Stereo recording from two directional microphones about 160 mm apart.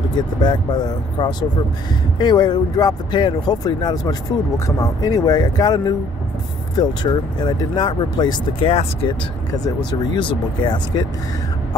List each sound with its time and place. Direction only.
0.4 s speech: 30° left (ahead or behind)
9.5 s speech: 25° left (ahead or behind)